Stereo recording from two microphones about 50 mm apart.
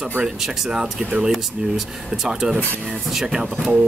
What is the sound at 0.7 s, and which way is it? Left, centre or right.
Speech, centre.